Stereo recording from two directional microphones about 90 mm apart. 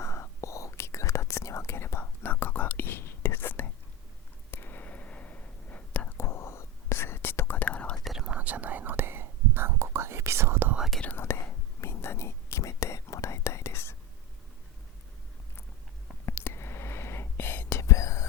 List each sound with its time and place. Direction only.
0.0 s whispering: 30° left (ahead or behind)
6.1 s whispering: 30° left (ahead or behind); by 7.9 s 15° left (ahead or behind)
8.0 s whispering: 5° right (ahead or behind); by 10.8 s 25° right (ahead or behind)
10.8 s whispering: centre (ahead or behind)
11.0 s whispering: 25° left (ahead or behind)
16.2 s whispering: 30° left (ahead or behind)